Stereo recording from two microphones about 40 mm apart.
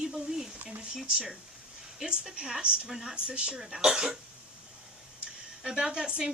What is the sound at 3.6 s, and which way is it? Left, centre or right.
Speech, centre.